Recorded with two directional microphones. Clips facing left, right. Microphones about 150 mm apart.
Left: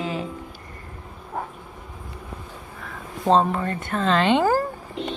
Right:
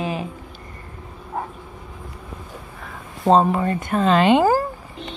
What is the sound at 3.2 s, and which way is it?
Speech, 10° right (ahead or behind).